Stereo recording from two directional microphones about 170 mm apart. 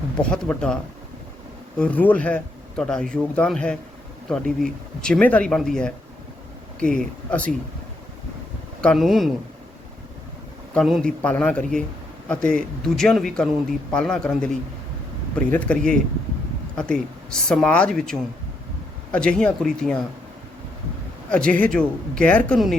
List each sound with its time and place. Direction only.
0.2 s speech: 5° left (ahead or behind)
1.8 s speech: 10° left (ahead or behind)
8.8 s speech: 5° left (ahead or behind)
10.8 s speech: centre (ahead or behind)
17.5 s speech: 5° left (ahead or behind)
21.2 s speech: 5° left (ahead or behind)